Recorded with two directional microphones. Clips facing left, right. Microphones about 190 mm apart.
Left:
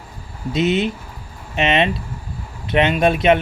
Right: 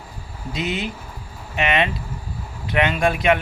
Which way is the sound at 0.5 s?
20° left (ahead or behind).